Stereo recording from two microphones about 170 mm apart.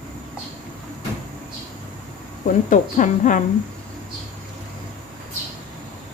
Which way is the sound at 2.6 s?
50° left (ahead or behind).